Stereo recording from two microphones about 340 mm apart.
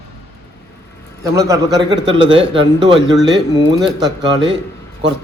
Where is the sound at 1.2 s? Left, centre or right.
Centre.